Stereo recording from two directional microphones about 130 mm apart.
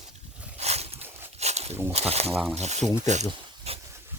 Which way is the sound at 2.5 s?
60° right (ahead or behind).